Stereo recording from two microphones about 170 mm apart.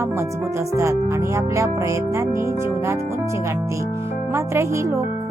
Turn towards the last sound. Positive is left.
turn(degrees=-15)  # may be behind; listen again after turning